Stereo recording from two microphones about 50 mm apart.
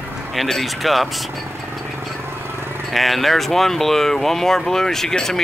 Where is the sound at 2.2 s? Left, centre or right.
Right.